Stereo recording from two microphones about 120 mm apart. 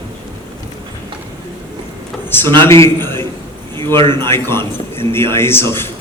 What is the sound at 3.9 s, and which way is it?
Speech, 40° right (ahead or behind).